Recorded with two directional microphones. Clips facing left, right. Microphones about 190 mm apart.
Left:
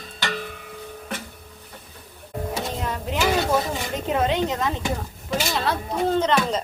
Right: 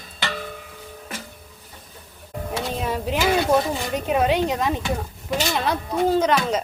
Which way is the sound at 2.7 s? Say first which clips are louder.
Right 3 dB; 20° right (ahead or behind).